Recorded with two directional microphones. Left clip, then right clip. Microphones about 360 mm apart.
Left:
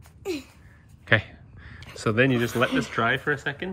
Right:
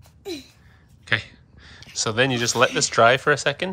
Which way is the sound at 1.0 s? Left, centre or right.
Centre.